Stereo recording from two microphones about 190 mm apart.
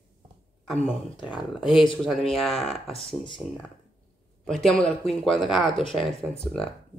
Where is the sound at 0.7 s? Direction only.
Centre (ahead or behind).